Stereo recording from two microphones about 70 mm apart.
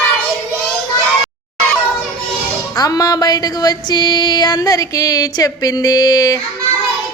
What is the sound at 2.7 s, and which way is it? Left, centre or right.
Music, left.